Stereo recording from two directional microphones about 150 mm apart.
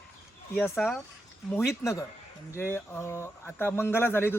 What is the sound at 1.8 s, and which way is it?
Speech, 20° left (ahead or behind).